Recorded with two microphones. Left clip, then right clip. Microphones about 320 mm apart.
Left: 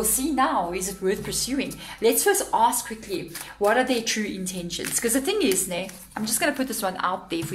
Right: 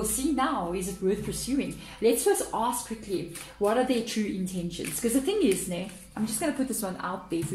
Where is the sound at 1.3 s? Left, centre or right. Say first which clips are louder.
Left 3 dB; left.